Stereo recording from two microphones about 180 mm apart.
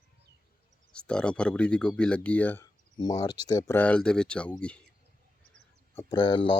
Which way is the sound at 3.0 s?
20° left (ahead or behind).